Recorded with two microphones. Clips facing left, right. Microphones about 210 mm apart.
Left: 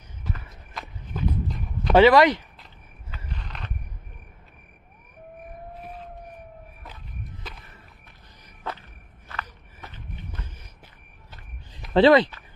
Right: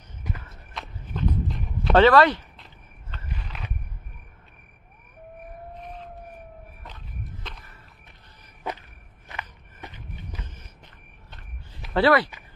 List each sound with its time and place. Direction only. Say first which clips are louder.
0.7 s walk: even; centre (ahead or behind)
2.0 s speech: left 1 dB; 10° left (ahead or behind)
2.6 s a sound: even; 5° left (ahead or behind)
3.3 s a sound: even; 5° right (ahead or behind)
5.8 s vehicle: even; 5° left (ahead or behind)
9.3 s walk: left 1 dB; 15° right (ahead or behind)
11.9 s speech: left 4 dB; 20° left (ahead or behind)